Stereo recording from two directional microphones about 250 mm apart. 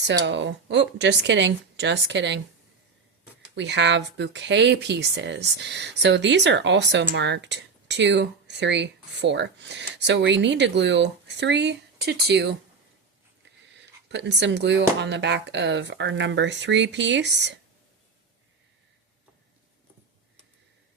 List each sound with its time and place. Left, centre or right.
0.0 s speech: right
3.5 s speech: right
14.1 s speech: right